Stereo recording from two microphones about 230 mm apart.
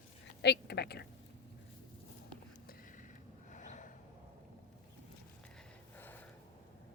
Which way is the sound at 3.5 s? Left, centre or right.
Left.